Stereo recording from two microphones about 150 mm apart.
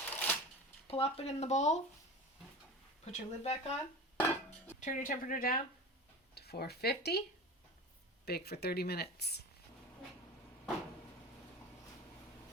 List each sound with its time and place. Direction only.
0.1 s shuffling cards: 10° left (ahead or behind)
0.9 s speech: 40° left (ahead or behind)
3.0 s speech: 45° left (ahead or behind)
4.8 s speech: 60° left (ahead or behind); by 5.6 s 75° left (ahead or behind)
6.3 s speech: 90° left
8.2 s speech: 90° left